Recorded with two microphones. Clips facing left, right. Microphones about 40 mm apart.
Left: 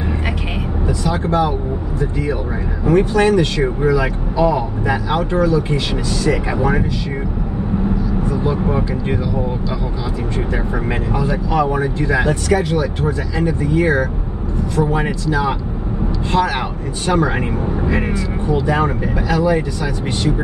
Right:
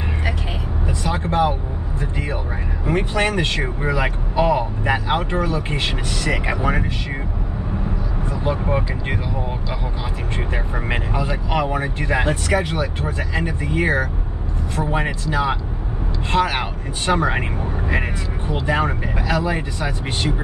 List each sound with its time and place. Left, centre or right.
0.8 s vehicle: right
2.9 s speech: right
8.3 s speech: right
10.5 s speech: right